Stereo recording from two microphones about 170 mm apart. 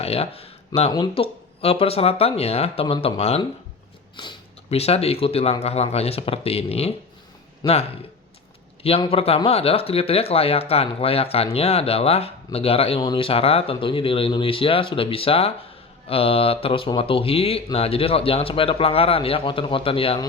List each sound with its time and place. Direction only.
0.0 s speech: 35° left (ahead or behind)